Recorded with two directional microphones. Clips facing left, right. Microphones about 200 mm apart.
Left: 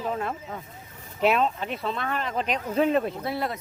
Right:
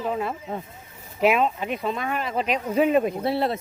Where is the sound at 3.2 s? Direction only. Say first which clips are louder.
Right 5 dB; 25° right (ahead or behind).